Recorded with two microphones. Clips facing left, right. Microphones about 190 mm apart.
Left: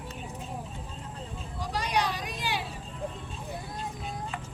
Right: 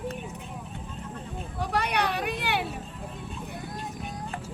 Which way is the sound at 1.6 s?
60° right (ahead or behind).